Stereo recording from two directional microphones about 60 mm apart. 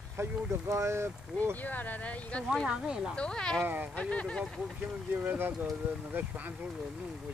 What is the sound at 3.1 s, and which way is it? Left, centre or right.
Speech, centre.